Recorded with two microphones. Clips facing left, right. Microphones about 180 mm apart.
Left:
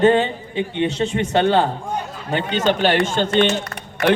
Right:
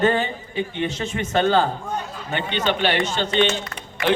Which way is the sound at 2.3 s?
45° left (ahead or behind).